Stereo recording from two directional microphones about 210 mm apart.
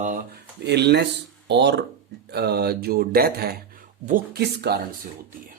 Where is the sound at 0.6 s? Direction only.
55° right (ahead or behind).